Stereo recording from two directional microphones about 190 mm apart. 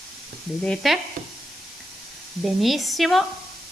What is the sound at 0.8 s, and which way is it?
Speech, centre (ahead or behind).